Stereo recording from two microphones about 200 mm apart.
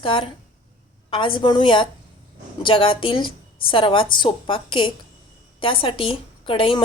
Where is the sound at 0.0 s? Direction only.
25° left (ahead or behind).